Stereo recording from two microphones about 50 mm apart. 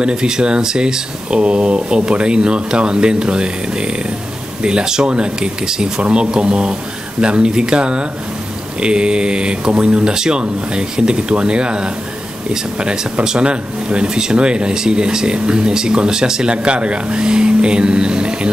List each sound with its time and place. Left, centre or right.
0.0 s speech: centre